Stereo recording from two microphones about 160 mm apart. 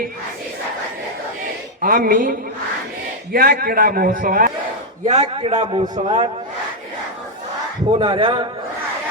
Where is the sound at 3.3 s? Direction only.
65° right (ahead or behind).